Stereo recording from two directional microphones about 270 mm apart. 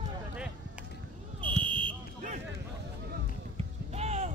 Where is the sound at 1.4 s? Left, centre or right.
Centre.